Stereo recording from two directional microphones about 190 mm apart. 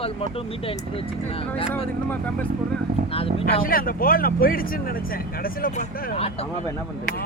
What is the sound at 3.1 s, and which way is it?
Speech, 30° left (ahead or behind).